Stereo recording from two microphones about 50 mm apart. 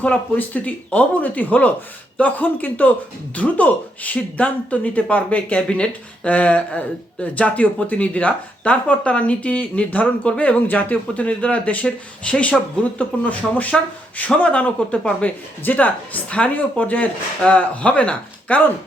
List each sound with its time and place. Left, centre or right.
0.3 s speech: left